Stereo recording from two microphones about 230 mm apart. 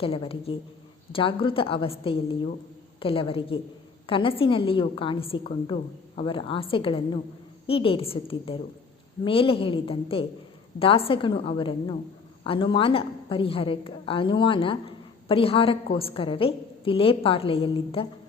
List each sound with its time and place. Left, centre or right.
0.0 s a woman's voice: left